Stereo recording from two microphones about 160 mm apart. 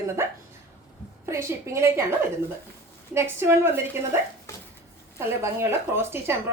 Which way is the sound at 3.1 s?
15° right (ahead or behind).